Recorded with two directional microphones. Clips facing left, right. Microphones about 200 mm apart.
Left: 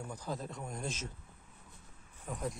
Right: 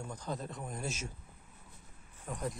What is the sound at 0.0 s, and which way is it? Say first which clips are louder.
Speech: even; 10° left (ahead or behind).